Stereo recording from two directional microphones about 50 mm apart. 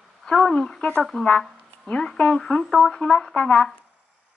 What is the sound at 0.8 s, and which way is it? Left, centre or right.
Speech, left.